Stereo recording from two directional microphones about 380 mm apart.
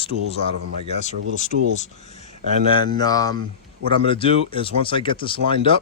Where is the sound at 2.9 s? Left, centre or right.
Centre.